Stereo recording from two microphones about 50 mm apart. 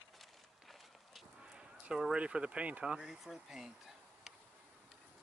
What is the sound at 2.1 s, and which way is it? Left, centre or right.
Speech, right.